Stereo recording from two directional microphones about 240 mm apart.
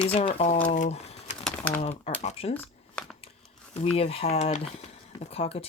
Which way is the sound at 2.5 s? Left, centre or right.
Centre.